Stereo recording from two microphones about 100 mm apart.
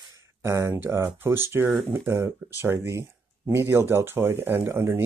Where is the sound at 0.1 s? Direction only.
30° right (ahead or behind).